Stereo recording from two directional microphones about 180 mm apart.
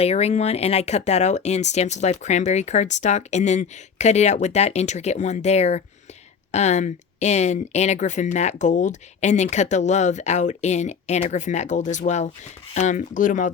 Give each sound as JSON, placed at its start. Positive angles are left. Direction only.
{"t": 0.0, "sound": "speech", "side_deg": 35}